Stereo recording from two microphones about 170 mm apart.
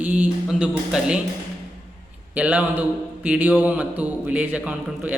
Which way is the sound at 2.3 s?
10° right (ahead or behind).